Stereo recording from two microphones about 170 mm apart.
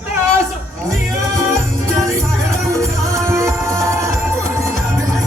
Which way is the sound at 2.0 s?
15° right (ahead or behind).